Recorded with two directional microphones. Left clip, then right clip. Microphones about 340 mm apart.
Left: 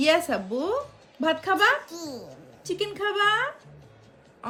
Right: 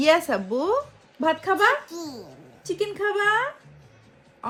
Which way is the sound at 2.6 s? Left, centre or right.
Centre.